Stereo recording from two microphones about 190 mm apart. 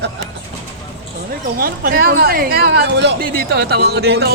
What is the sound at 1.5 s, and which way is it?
Speech, 50° right (ahead or behind).